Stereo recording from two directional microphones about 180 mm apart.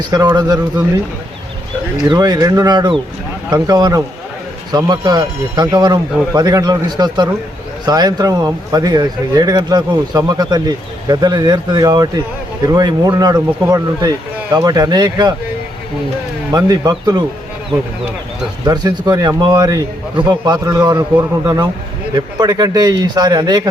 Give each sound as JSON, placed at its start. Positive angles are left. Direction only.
{"t": 0.1, "sound": "speech", "side_deg": -25}
{"t": 2.0, "sound": "speech", "side_deg": -25}
{"t": 16.5, "sound": "speech", "side_deg": -20}
{"t": 18.6, "sound": "speech", "side_deg": -25}